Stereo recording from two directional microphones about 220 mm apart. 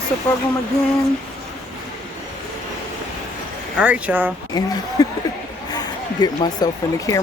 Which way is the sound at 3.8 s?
5° right (ahead or behind).